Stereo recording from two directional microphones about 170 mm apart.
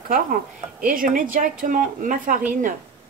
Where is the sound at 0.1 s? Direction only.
55° right (ahead or behind).